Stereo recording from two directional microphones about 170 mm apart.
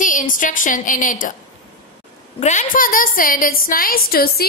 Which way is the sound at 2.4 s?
50° left (ahead or behind).